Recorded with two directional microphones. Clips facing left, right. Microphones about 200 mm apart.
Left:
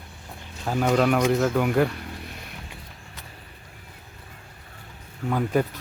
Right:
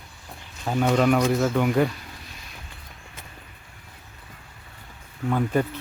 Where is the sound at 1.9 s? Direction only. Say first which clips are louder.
Left 6 dB; 60° left (ahead or behind).